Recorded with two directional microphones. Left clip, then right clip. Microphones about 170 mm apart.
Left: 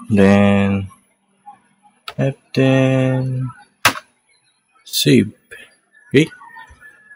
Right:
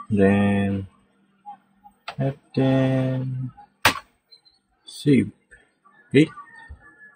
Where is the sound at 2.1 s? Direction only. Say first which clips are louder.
Left 7 dB; 90° left.